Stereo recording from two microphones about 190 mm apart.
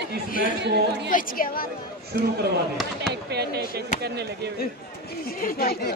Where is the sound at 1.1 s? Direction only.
45° left (ahead or behind).